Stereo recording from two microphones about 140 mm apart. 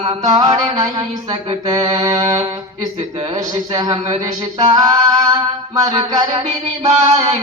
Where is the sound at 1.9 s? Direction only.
25° right (ahead or behind).